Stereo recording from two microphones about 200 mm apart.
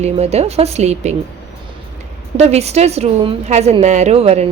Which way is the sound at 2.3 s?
30° right (ahead or behind).